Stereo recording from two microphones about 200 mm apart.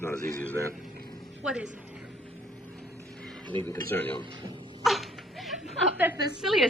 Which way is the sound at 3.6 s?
10° left (ahead or behind).